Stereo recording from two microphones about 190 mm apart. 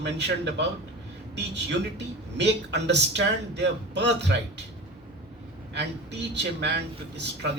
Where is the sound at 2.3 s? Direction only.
65° right (ahead or behind).